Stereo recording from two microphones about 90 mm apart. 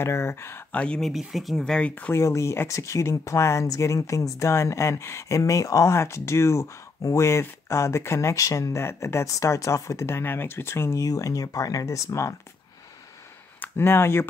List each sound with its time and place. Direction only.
0.0 s speech: 30° left (ahead or behind)
0.7 s speech: 10° left (ahead or behind)
1.1 s speech: 5° right (ahead or behind); by 2.1 s 15° left (ahead or behind)
2.1 s speech: 35° left (ahead or behind)
13.6 s speech: 25° left (ahead or behind)